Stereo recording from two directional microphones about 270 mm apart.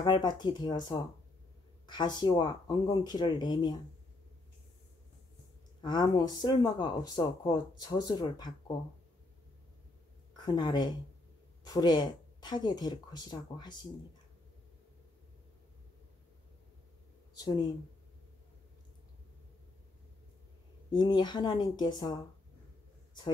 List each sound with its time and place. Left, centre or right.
0.0 s speech: centre
5.9 s speech: centre
10.3 s speech: centre
17.4 s speech: centre
20.9 s speech: centre